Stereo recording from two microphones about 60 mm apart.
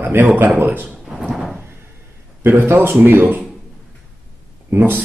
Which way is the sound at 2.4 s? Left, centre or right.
Right.